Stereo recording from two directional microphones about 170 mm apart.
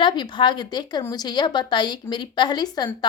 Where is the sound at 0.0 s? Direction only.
25° left (ahead or behind).